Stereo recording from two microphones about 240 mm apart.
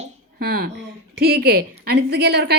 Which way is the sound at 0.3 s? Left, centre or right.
Right.